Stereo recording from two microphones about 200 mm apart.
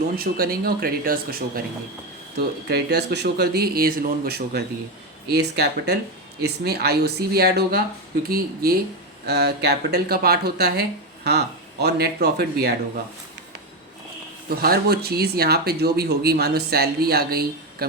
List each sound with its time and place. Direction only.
0.2 s speech: 50° right (ahead or behind)
14.5 s speech: 50° right (ahead or behind)